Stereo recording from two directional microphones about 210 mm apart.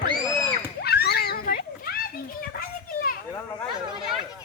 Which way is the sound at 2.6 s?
45° left (ahead or behind).